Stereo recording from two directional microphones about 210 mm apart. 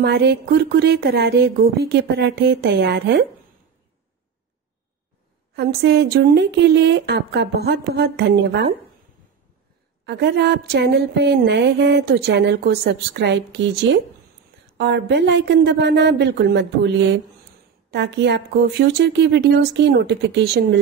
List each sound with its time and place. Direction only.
0.0 s a woman's voice: 50° right (ahead or behind)
5.6 s a woman's voice: 50° right (ahead or behind)
10.0 s a woman's voice: 50° right (ahead or behind)